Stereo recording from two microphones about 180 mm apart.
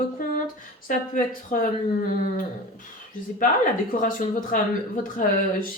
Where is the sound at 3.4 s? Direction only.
50° left (ahead or behind).